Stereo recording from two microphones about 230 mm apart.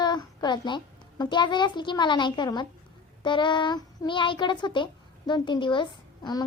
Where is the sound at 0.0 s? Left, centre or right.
Centre.